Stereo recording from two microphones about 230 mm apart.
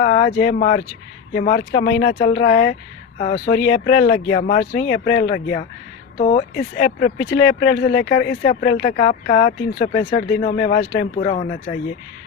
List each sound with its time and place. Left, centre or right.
0.0 s a sound: left
0.4 s speech: left
3.2 s speech: left
4.4 s speech: left